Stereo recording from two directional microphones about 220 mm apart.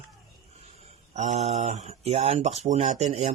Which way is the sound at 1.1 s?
30° right (ahead or behind).